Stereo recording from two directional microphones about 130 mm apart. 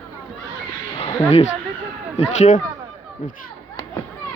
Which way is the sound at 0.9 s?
50° left (ahead or behind).